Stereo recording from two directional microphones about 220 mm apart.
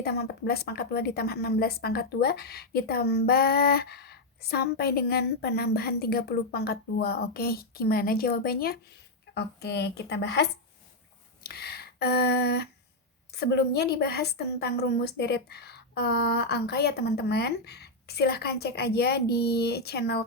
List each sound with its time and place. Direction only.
0.0 s a woman's voice: 45° left (ahead or behind)
11.4 s a sound: 45° left (ahead or behind)
13.3 s a woman's voice: 50° left (ahead or behind)